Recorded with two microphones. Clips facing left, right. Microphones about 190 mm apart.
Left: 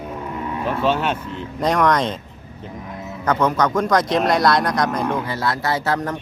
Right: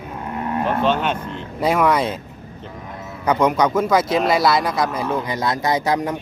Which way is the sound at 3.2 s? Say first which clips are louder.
Right 2 dB; 10° right (ahead or behind).